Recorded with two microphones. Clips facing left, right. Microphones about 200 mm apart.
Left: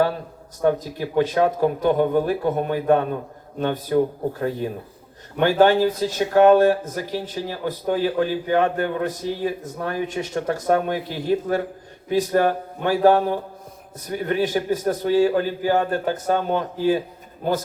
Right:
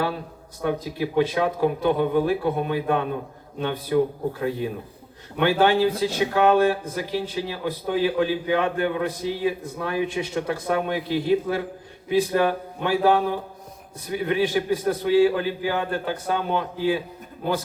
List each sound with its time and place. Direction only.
0.6 s speech: 45° left (ahead or behind)